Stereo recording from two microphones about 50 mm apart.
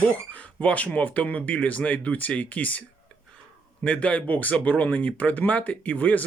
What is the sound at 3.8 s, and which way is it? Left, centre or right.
Speech, left.